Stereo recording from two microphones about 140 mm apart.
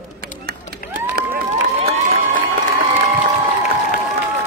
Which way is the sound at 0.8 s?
90° left.